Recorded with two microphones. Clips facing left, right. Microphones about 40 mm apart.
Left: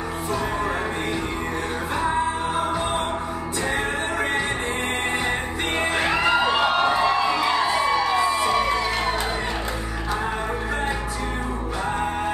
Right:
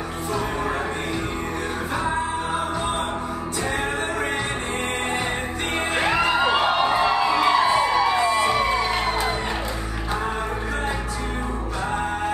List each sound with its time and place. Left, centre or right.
5.9 s music: centre